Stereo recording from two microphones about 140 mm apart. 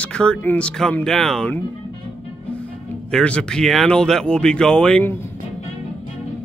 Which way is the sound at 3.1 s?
5° left (ahead or behind).